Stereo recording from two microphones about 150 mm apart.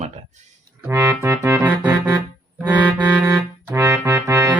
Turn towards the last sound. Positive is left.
turn(degrees=-20)  # may be behind; listen again after turning